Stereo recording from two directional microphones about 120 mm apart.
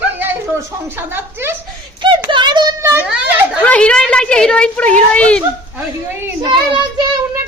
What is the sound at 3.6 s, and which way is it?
A woman's voice, 10° left (ahead or behind).